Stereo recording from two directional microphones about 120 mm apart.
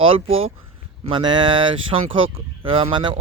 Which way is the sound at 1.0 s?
45° right (ahead or behind).